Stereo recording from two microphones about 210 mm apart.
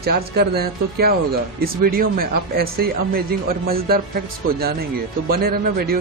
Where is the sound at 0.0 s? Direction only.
50° right (ahead or behind).